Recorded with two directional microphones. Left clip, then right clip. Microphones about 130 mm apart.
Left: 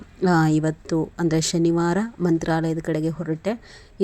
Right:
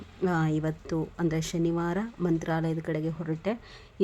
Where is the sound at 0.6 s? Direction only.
25° left (ahead or behind).